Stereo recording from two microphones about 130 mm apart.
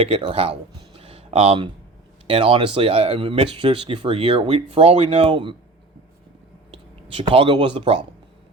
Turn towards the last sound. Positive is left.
turn(degrees=-40)  # may be behind; listen again after turning